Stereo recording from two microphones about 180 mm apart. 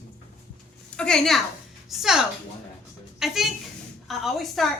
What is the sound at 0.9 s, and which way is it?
A woman's voice, 5° left (ahead or behind).